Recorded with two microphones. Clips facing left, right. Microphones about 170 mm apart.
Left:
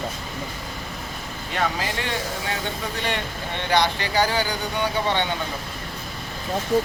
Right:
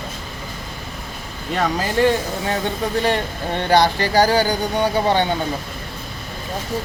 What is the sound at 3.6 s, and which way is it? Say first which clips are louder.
Speech: right 6 dB; 35° right (ahead or behind).